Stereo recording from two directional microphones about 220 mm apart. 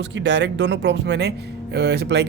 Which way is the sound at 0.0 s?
55° right (ahead or behind).